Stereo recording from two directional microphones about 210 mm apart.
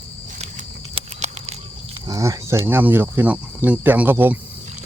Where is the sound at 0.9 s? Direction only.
30° right (ahead or behind).